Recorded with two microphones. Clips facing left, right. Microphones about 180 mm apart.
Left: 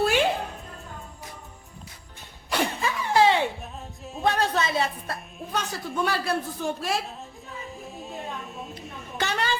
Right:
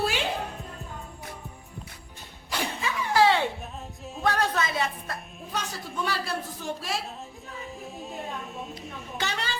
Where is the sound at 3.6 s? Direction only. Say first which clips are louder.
Even; centre (ahead or behind).